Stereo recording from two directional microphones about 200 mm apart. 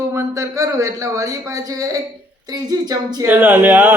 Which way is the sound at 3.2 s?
10° right (ahead or behind).